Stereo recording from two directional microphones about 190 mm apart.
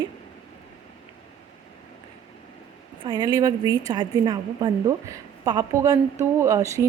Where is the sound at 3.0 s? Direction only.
25° right (ahead or behind).